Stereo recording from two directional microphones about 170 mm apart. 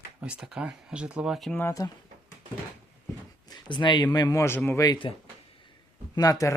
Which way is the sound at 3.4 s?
25° left (ahead or behind).